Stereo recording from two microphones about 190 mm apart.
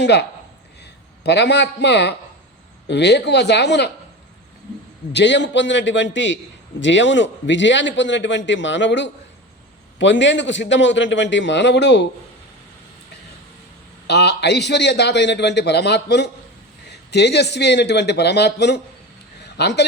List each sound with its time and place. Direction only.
0.0 s a man's voice: 65° left (ahead or behind)
5.1 s a man's voice: 70° left (ahead or behind)
14.1 s a man's voice: 60° left (ahead or behind)